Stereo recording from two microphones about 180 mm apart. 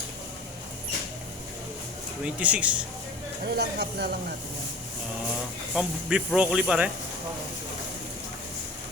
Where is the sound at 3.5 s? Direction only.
65° right (ahead or behind).